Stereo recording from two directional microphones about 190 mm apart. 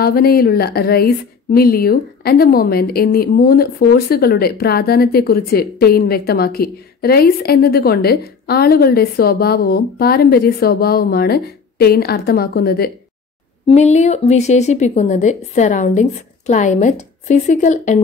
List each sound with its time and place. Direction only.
0.0 s a woman's voice: 55° left (ahead or behind)
13.7 s speech: 35° left (ahead or behind)